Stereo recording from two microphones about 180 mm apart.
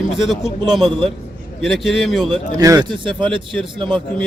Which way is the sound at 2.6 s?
20° right (ahead or behind).